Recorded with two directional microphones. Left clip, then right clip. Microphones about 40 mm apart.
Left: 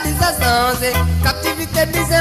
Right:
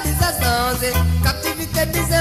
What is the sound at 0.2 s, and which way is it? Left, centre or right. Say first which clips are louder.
Music: left 4 dB; left.